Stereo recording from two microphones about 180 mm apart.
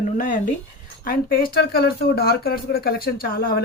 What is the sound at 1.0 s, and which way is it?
Speech, 55° left (ahead or behind).